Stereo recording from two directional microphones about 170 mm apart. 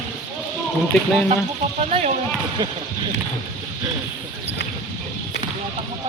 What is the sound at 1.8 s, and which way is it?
Speech, 40° right (ahead or behind).